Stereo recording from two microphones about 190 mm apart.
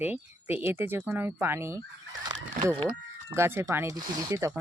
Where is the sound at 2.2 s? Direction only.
20° right (ahead or behind).